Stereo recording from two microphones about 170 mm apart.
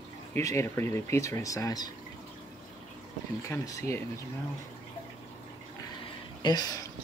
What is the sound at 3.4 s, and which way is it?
Speech, 20° left (ahead or behind).